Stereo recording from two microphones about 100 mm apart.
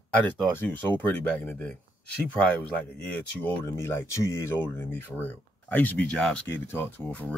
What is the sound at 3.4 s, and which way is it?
Speech, 20° left (ahead or behind).